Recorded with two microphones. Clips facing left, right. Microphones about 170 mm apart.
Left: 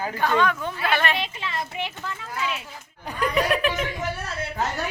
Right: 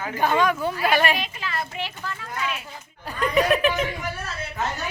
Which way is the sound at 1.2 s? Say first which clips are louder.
Even; 25° left (ahead or behind).